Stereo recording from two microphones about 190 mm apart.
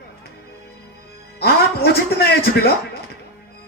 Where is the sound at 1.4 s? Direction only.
55° left (ahead or behind).